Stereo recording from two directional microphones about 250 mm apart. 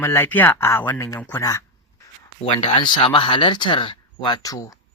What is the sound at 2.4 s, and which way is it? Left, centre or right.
Speech, left.